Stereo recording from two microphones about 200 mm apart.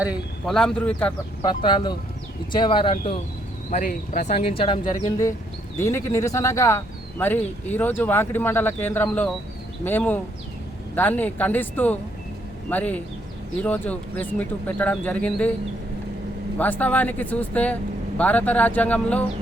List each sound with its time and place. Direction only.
0.0 s a man's voice: 5° right (ahead or behind)
1.4 s speech: 25° left (ahead or behind)
3.7 s speech: 40° left (ahead or behind); by 15.5 s 5° left (ahead or behind)
16.6 s speech: 10° left (ahead or behind)